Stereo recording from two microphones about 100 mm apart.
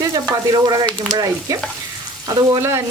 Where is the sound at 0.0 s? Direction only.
40° right (ahead or behind).